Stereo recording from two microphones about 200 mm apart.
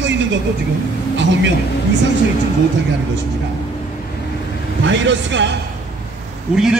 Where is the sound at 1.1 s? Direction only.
65° right (ahead or behind).